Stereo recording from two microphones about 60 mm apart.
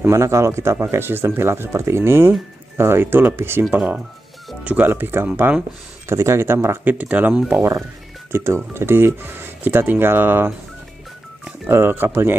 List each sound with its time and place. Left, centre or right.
0.0 s speech: right
3.7 s speech: right
6.0 s speech: right
6.8 s speech: right
8.5 s speech: right
11.7 s speech: right